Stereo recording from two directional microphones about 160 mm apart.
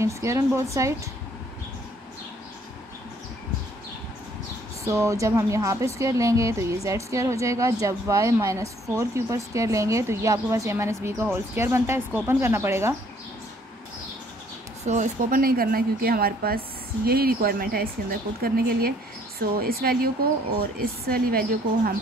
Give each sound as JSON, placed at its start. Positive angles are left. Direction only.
{"t": 0.0, "sound": "speech", "side_deg": -15}
{"t": 4.8, "sound": "speech", "side_deg": -20}
{"t": 14.9, "sound": "a woman's voice", "side_deg": -55}